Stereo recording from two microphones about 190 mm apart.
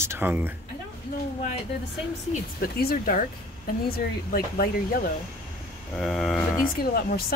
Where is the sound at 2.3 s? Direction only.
50° left (ahead or behind).